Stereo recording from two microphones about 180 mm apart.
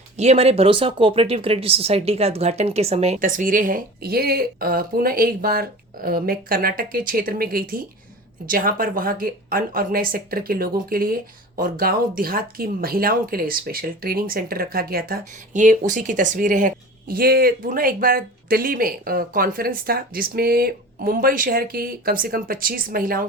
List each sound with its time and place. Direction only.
0.2 s speech: 35° right (ahead or behind)
3.2 s speech: 50° right (ahead or behind)